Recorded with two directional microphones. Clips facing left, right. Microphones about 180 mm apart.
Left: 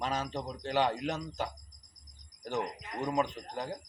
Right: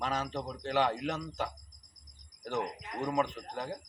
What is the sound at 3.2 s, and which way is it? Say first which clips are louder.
Speech: even; 25° left (ahead or behind).